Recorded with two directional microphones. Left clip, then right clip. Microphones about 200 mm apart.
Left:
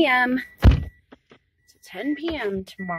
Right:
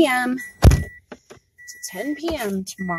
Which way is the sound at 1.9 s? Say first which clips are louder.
Right 2 dB; 5° right (ahead or behind).